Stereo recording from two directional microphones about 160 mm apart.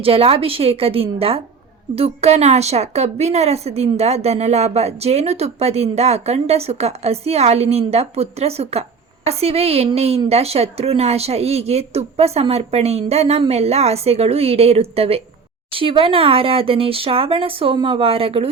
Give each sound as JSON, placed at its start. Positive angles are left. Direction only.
{"t": 0.0, "sound": "a woman's voice", "side_deg": -35}